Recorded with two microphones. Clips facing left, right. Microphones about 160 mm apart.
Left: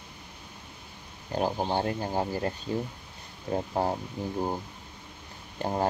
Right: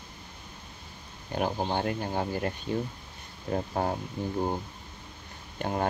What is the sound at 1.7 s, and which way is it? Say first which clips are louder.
Speech: left 1 dB; 35° left (ahead or behind).